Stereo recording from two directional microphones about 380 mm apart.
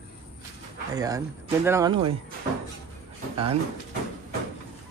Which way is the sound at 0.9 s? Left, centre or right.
Centre.